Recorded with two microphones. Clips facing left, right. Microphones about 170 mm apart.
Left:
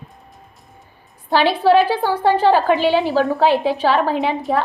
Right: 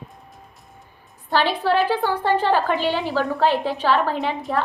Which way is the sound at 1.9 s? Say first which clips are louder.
Left 3 dB; 40° left (ahead or behind).